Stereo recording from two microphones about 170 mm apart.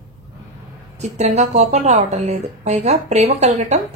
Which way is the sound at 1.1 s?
40° right (ahead or behind).